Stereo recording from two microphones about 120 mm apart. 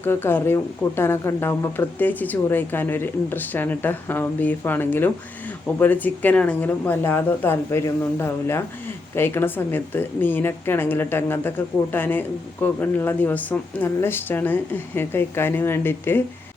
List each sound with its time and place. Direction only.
0.0 s speech: 20° left (ahead or behind)